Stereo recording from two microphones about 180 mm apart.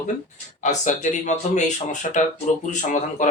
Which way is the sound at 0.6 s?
40° left (ahead or behind).